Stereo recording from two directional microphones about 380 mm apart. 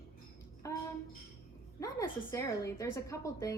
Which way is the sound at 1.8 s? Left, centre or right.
Centre.